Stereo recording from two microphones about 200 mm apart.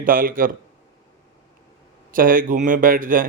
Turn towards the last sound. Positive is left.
turn(degrees=-45)  # may be behind; listen again after turning